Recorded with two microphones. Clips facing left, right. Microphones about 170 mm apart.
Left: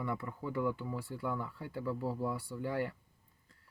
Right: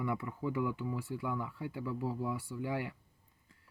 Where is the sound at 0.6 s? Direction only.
15° right (ahead or behind).